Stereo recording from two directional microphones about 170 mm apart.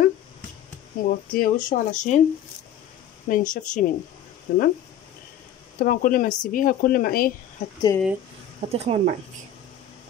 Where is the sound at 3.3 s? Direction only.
50° left (ahead or behind).